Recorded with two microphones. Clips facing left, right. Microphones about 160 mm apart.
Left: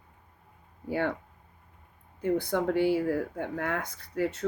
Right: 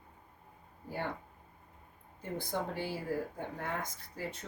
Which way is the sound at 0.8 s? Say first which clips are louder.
Left 9 dB; 75° left (ahead or behind).